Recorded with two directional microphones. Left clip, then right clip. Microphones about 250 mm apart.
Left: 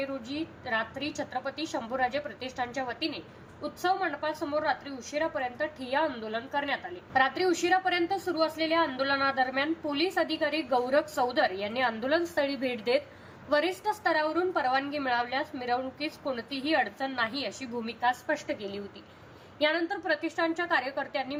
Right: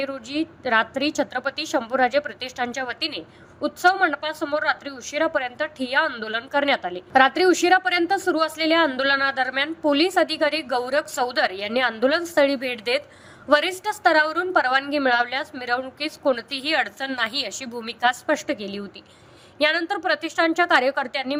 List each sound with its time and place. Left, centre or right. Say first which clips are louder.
0.0 s a woman's voice: right 7 dB; right